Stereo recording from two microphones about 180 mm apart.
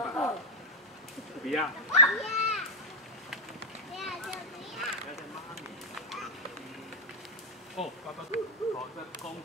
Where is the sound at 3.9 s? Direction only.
Centre (ahead or behind).